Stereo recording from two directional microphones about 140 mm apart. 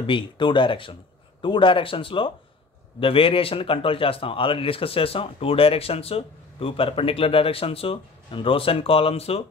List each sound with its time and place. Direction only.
0.0 s speech: 35° left (ahead or behind)